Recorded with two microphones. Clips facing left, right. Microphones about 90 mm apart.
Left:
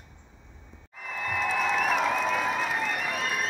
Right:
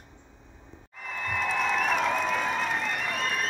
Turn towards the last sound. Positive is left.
turn(degrees=5)  # may be behind; listen again after turning